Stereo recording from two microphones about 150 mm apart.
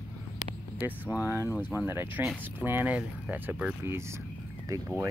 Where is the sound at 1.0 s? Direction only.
20° left (ahead or behind).